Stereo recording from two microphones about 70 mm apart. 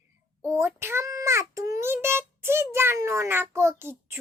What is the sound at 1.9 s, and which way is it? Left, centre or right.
Child singing, right.